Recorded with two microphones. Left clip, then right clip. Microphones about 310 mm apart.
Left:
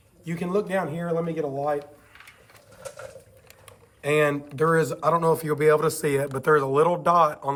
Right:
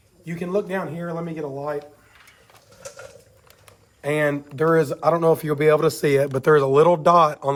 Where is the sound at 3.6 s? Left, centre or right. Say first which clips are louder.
Even; centre.